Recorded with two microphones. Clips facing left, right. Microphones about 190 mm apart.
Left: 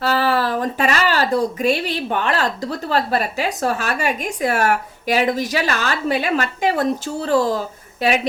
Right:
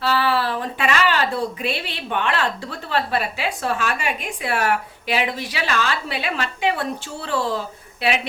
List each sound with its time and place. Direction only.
0.0 s speech: 45° left (ahead or behind)